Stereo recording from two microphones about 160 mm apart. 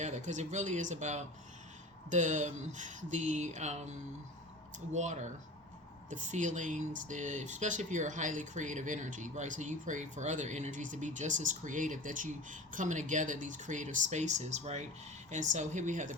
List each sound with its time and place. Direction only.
0.0 s speech: 50° right (ahead or behind)